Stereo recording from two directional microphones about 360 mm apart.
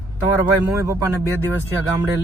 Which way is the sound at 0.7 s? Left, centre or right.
Centre.